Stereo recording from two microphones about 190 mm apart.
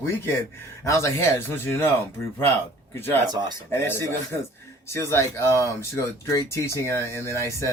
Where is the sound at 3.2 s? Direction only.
20° right (ahead or behind).